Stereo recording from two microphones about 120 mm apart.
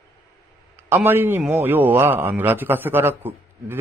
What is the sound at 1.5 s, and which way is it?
A man's voice, 15° right (ahead or behind).